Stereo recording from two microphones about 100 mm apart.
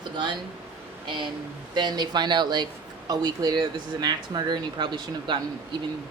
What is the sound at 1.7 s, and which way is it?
A woman's voice, 45° right (ahead or behind).